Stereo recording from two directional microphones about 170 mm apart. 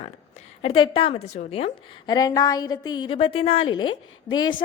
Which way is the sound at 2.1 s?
20° left (ahead or behind).